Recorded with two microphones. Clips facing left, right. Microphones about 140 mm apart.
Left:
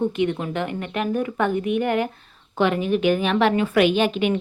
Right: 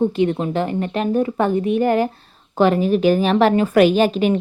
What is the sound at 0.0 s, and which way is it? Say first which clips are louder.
A woman's voice: right 4 dB; 35° right (ahead or behind).